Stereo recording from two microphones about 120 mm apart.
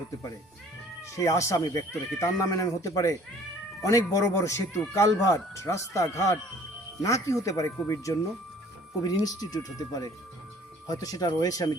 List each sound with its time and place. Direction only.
1.1 s speech: 25° left (ahead or behind)